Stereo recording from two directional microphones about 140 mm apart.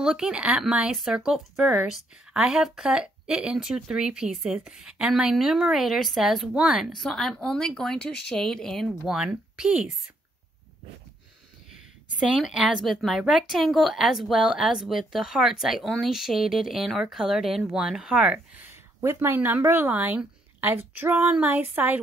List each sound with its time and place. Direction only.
0.0 s speech: 5° right (ahead or behind)
11.7 s speech: centre (ahead or behind)